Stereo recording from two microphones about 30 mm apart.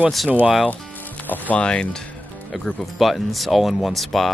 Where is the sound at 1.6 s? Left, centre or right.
Left.